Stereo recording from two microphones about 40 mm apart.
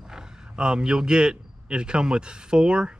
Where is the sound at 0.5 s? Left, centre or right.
Right.